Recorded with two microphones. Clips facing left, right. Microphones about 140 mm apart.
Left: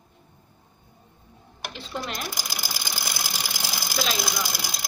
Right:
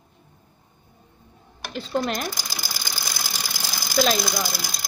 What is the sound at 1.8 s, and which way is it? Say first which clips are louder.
Speech: right 9 dB; 45° right (ahead or behind).